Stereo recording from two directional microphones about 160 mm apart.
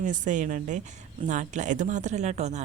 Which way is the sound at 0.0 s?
50° right (ahead or behind).